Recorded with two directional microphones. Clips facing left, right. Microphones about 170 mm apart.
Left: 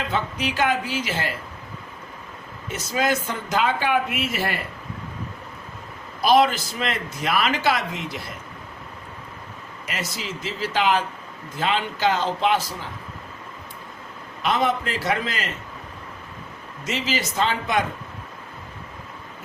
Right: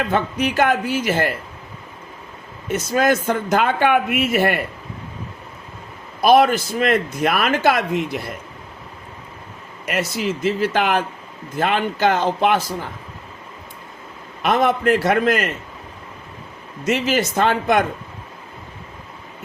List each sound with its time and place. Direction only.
0.0 s speech: 50° right (ahead or behind)
2.7 s speech: 50° right (ahead or behind)
6.2 s speech: 55° right (ahead or behind)
9.8 s speech: 55° right (ahead or behind)
14.4 s speech: 55° right (ahead or behind)
16.8 s speech: 55° right (ahead or behind)